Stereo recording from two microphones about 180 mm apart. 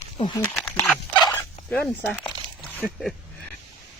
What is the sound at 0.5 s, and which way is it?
Dog, 5° left (ahead or behind).